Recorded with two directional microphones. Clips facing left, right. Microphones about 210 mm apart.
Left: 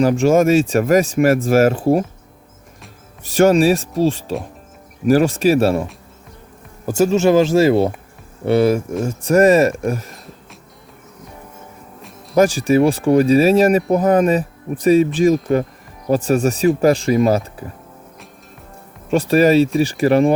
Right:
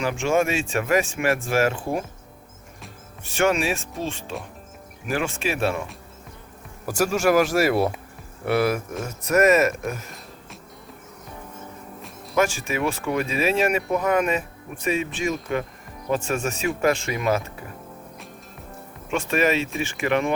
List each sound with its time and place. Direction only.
0.0 s speech: 40° left (ahead or behind)
3.2 s speech: 40° left (ahead or behind)
6.8 s speech: 25° left (ahead or behind)
10.1 s music: centre (ahead or behind)
12.3 s speech: 35° left (ahead or behind)
19.1 s speech: 35° left (ahead or behind)